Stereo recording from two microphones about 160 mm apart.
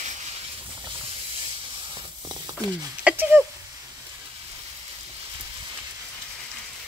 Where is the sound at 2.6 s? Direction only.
10° right (ahead or behind).